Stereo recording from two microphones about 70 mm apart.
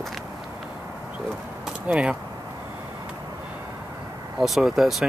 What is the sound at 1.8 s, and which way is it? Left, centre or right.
Speech, centre.